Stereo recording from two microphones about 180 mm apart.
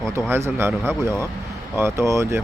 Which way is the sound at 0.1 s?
15° right (ahead or behind).